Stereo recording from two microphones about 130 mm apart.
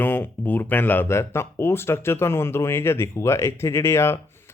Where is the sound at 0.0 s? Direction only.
15° left (ahead or behind).